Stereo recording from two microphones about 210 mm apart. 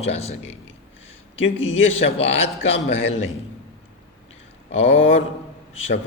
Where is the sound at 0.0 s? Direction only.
30° left (ahead or behind).